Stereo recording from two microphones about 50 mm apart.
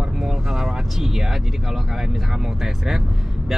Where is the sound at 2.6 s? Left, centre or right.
Centre.